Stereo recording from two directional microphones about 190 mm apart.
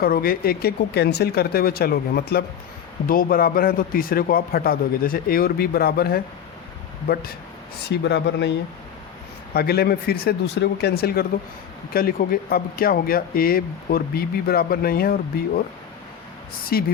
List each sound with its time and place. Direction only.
0.0 s speech: 50° left (ahead or behind)
9.6 s speech: 55° left (ahead or behind)
16.7 s speech: 55° left (ahead or behind)